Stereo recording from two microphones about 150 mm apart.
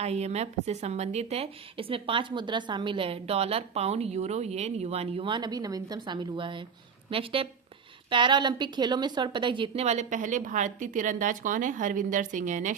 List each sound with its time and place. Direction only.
0.0 s a woman's voice: 45° right (ahead or behind)